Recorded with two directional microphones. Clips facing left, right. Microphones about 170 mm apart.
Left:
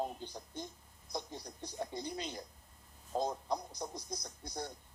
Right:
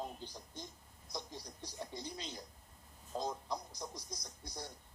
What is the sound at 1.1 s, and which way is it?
Speech, 55° left (ahead or behind).